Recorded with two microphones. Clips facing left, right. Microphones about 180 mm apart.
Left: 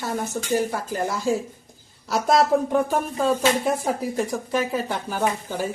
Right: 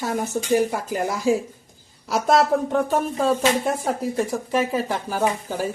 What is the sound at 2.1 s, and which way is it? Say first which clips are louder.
Speech: even; centre (ahead or behind).